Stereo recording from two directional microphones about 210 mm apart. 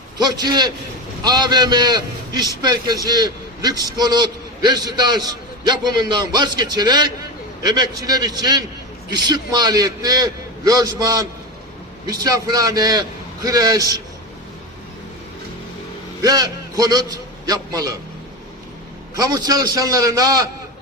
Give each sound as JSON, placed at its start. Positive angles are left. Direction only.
{"t": 0.2, "sound": "a man's voice", "side_deg": -20}
{"t": 16.2, "sound": "a man's voice", "side_deg": -15}
{"t": 19.1, "sound": "a man's voice", "side_deg": -20}